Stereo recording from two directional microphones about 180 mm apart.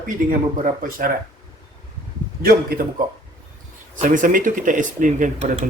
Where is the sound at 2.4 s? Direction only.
55° right (ahead or behind).